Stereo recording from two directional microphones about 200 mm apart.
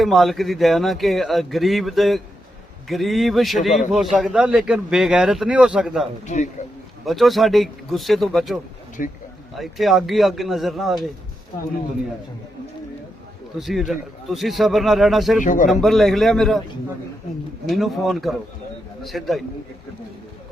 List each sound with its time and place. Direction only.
0.0 s a man's voice: centre (ahead or behind)
6.2 s speech: 35° left (ahead or behind)
7.0 s a man's voice: centre (ahead or behind)
9.0 s speech: 40° left (ahead or behind)
9.6 s a man's voice: centre (ahead or behind)
13.6 s a man's voice: centre (ahead or behind)
15.4 s speech: 40° left (ahead or behind)
15.7 s a man's voice: centre (ahead or behind)
17.7 s a man's voice: centre (ahead or behind)